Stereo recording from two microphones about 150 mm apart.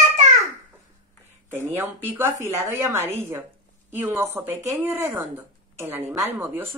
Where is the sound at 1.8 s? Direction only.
15° right (ahead or behind).